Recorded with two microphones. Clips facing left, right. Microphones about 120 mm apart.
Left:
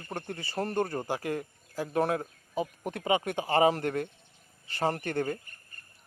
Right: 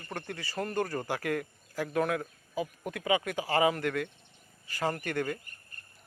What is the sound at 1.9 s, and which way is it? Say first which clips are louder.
Speech: left 2 dB; 30° left (ahead or behind).